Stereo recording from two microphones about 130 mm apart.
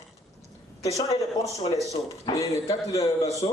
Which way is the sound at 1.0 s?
25° left (ahead or behind).